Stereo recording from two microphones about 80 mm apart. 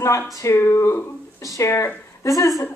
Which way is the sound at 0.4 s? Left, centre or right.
Left.